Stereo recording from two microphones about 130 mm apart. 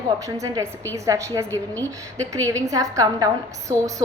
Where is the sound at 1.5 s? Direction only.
15° left (ahead or behind).